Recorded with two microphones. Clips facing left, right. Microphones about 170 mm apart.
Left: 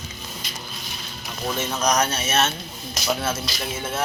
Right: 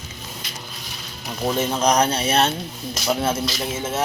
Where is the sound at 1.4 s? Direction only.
30° right (ahead or behind).